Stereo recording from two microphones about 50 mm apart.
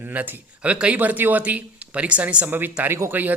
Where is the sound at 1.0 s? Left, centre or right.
Right.